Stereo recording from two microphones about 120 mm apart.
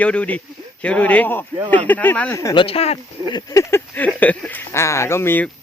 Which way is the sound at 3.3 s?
30° left (ahead or behind).